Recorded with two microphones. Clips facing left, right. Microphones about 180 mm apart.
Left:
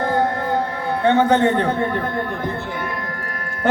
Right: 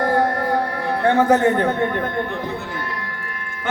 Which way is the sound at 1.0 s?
25° left (ahead or behind).